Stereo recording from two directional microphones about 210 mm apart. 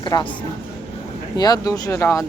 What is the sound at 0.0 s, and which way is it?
Speech, 20° left (ahead or behind).